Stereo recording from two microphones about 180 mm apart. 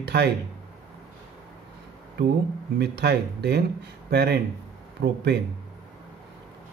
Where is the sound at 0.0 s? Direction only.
65° right (ahead or behind).